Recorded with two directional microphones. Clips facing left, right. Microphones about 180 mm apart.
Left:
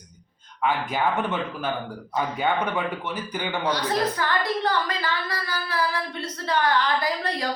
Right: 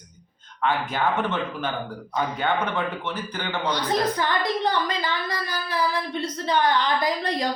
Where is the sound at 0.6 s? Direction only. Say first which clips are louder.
Even; 10° left (ahead or behind).